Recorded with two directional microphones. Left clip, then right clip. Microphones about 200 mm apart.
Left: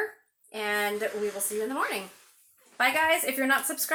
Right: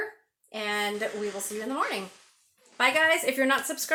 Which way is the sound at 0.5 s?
40° right (ahead or behind).